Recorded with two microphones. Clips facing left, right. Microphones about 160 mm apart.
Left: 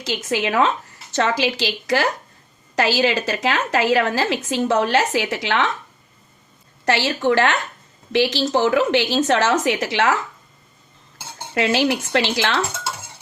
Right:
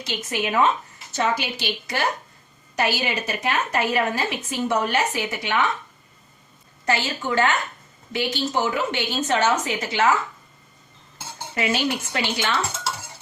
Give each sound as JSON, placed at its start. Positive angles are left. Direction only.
{"t": 0.0, "sound": "a woman's voice", "side_deg": 90}
{"t": 6.8, "sound": "a woman's voice", "side_deg": 75}
{"t": 11.5, "sound": "speech", "side_deg": 85}